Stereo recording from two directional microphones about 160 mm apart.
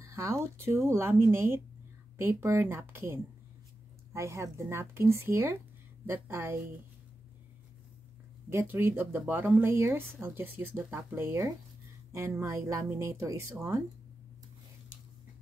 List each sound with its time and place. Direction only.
0.0 s speech: 15° right (ahead or behind)
8.5 s speech: 15° right (ahead or behind)